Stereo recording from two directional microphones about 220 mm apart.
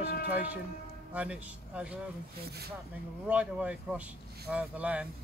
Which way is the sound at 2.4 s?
45° right (ahead or behind).